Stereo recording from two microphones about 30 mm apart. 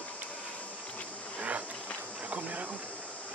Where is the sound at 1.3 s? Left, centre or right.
Right.